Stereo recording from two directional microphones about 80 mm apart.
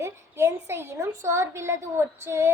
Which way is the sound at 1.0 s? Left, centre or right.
Right.